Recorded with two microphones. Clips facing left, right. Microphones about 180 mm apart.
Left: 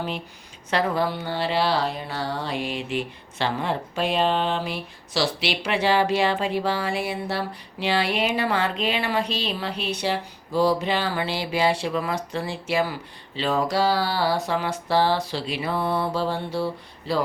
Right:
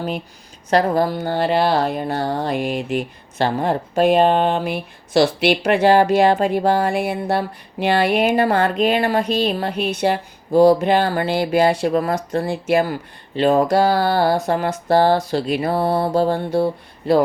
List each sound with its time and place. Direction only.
0.7 s speech: 40° right (ahead or behind)